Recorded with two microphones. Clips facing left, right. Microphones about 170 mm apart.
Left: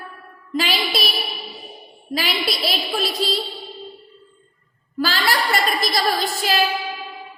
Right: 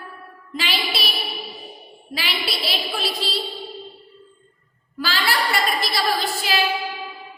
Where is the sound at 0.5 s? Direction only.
40° left (ahead or behind).